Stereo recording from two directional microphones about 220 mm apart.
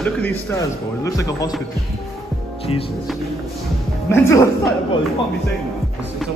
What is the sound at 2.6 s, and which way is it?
Speech, 25° left (ahead or behind).